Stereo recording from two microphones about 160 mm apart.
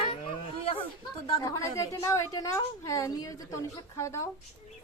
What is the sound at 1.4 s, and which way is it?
A woman's voice, 20° left (ahead or behind).